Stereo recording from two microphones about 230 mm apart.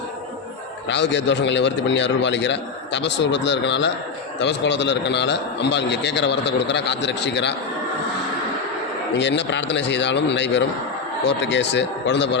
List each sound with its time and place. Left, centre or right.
0.9 s a man's voice: left
9.1 s a man's voice: left